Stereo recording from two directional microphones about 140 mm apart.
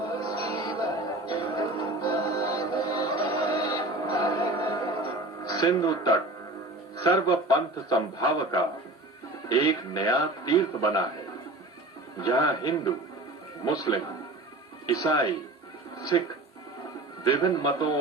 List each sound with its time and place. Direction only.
0.3 s music: 25° left (ahead or behind)
5.5 s a man's voice: 25° left (ahead or behind)
9.6 s a man's voice: 25° left (ahead or behind)
12.2 s a man's voice: 25° left (ahead or behind)
17.3 s a man's voice: 25° left (ahead or behind)